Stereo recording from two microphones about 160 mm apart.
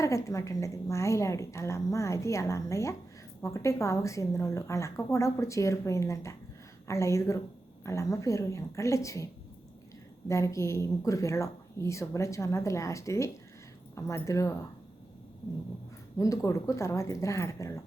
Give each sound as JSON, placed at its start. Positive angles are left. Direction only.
{"t": 0.0, "sound": "a woman's voice", "side_deg": 20}
{"t": 16.1, "sound": "a woman's voice", "side_deg": 20}